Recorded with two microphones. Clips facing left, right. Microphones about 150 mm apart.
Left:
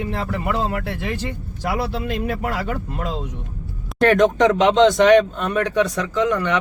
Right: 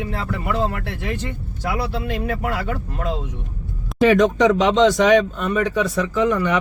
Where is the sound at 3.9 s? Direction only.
Centre (ahead or behind).